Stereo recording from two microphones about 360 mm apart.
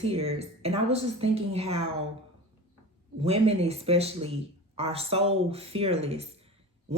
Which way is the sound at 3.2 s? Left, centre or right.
Centre.